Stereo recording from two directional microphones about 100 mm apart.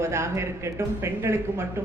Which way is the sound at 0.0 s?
25° right (ahead or behind).